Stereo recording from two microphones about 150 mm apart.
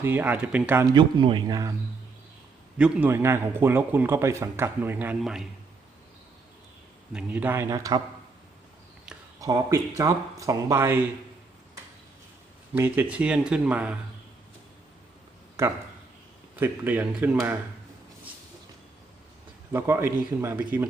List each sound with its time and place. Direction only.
0.0 s a man's voice: 15° right (ahead or behind)
0.9 s speech: 30° right (ahead or behind)
2.7 s a man's voice: 10° right (ahead or behind)
5.2 s speech: centre (ahead or behind)
7.1 s a man's voice: 10° right (ahead or behind)
9.4 s speech: 20° right (ahead or behind)
12.7 s a man's voice: 15° right (ahead or behind)
16.6 s a man's voice: 15° right (ahead or behind)
19.7 s a man's voice: 15° right (ahead or behind)